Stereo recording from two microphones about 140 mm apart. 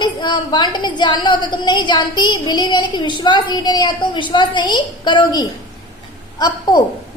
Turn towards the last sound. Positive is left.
turn(degrees=30)  # may be behind; listen again after turning